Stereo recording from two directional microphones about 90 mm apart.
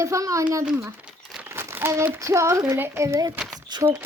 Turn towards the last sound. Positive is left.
turn(degrees=-55)  # may be behind; listen again after turning